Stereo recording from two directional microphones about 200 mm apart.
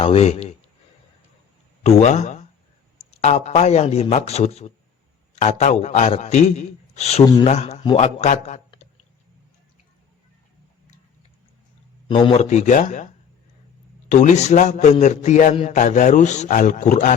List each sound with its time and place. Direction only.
0.0 s speech: 30° left (ahead or behind)
1.8 s a man's voice: 35° left (ahead or behind)
12.0 s a man's voice: 25° left (ahead or behind)
14.1 s a man's voice: 35° left (ahead or behind)